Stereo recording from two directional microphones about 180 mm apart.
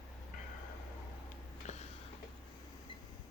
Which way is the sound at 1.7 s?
40° left (ahead or behind).